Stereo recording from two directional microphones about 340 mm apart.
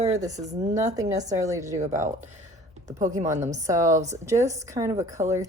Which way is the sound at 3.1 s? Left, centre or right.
Centre.